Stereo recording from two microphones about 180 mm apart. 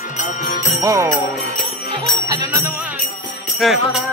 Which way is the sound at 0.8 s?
15° right (ahead or behind).